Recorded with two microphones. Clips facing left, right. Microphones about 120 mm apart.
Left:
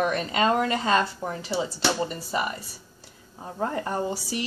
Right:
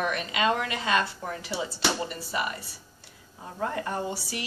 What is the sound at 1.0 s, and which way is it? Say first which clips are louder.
Speech: left 3 dB; 25° left (ahead or behind).